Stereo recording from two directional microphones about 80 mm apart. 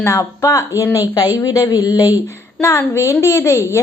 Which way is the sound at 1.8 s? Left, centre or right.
Right.